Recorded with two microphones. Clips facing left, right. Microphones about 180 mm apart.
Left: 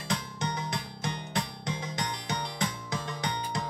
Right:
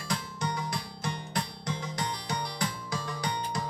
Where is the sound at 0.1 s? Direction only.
20° left (ahead or behind).